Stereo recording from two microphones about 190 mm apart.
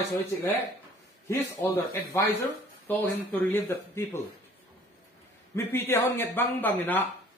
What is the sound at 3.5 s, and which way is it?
Speech, 15° left (ahead or behind).